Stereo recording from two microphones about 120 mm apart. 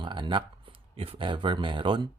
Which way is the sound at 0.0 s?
40° right (ahead or behind).